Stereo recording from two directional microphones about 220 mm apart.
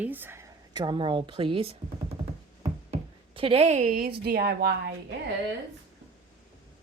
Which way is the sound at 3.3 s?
25° right (ahead or behind).